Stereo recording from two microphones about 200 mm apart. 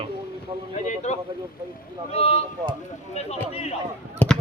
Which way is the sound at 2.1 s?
30° left (ahead or behind).